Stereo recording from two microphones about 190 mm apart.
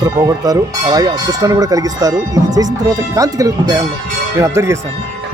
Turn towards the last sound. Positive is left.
turn(degrees=-15)  # may be behind; listen again after turning